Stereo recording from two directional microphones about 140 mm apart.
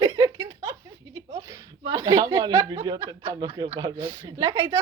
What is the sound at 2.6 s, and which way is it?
A woman's voice, 30° right (ahead or behind).